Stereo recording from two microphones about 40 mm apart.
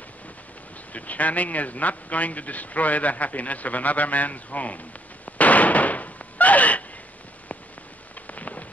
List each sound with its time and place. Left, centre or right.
0.9 s a man's voice: left
5.2 s a sound: left
8.3 s rain: left